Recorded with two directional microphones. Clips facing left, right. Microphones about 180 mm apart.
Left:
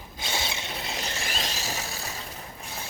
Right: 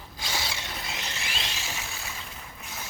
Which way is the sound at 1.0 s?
40° left (ahead or behind).